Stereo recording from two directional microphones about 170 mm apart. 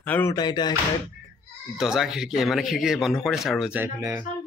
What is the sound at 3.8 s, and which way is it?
Speech, 15° right (ahead or behind).